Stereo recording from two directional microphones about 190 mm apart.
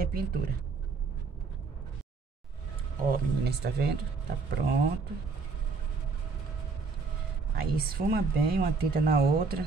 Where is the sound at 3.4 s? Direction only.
60° right (ahead or behind).